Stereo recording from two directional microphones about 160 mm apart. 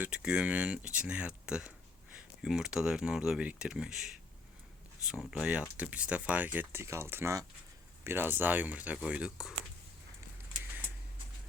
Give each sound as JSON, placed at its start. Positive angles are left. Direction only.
{"t": 0.0, "sound": "speech", "side_deg": -5}